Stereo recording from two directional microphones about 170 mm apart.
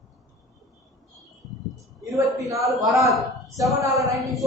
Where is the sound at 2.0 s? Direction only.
20° right (ahead or behind).